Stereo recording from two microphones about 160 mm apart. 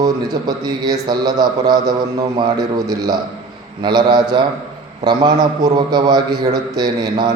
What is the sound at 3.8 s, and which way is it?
A man's voice, 25° right (ahead or behind).